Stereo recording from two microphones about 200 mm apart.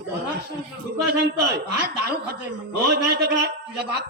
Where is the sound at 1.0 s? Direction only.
55° right (ahead or behind).